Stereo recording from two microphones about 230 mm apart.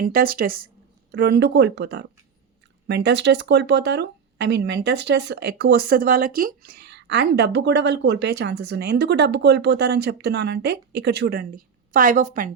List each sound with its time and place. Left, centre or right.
0.0 s speech: right